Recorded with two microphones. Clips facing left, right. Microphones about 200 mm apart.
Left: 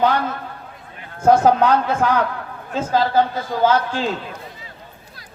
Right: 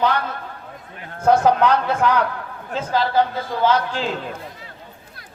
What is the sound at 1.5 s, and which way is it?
A man's voice, 50° left (ahead or behind).